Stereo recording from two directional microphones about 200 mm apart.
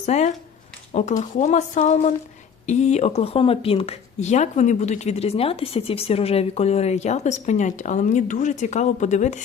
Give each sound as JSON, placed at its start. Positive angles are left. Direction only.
{"t": 0.0, "sound": "speech", "side_deg": 35}